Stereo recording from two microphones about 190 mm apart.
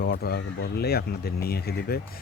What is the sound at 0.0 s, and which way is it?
Speech, 55° left (ahead or behind).